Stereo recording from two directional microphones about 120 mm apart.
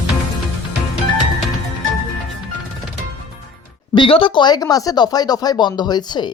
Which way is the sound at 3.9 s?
45° left (ahead or behind).